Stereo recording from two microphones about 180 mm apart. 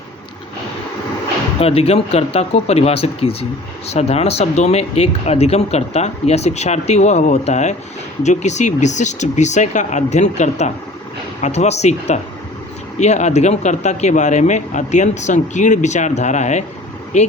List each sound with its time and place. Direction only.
1.5 s speech: 35° left (ahead or behind)